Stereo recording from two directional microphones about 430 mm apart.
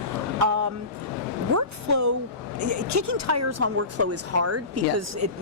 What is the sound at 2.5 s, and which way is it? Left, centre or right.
Speech, right.